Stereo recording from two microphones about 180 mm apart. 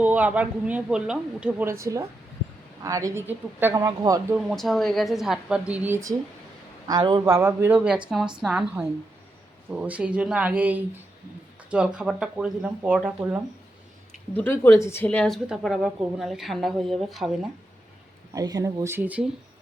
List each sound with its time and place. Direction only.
0.0 s a man's voice: 10° right (ahead or behind)
4.4 s a woman's voice: centre (ahead or behind)
9.6 s a man's voice: 10° right (ahead or behind)
14.3 s a woman's voice: 10° left (ahead or behind)
18.3 s a man's voice: 20° right (ahead or behind)